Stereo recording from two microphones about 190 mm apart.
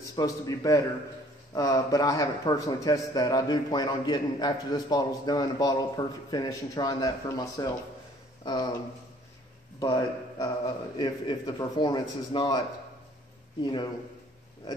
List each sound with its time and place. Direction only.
0.0 s a man's voice: 20° left (ahead or behind)
9.8 s a man's voice: 20° left (ahead or behind)